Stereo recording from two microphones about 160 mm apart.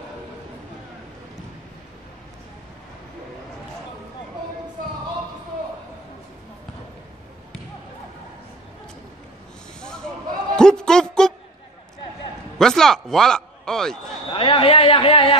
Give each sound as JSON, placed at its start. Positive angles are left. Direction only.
{"t": 9.8, "sound": "a sound", "side_deg": 5}
{"t": 12.5, "sound": "a man's voice", "side_deg": 5}
{"t": 14.3, "sound": "a man's voice", "side_deg": 35}